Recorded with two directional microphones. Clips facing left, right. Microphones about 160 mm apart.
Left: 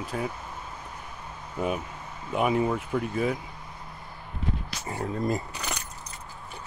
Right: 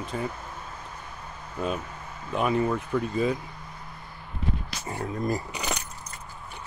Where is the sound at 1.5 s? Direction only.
15° left (ahead or behind).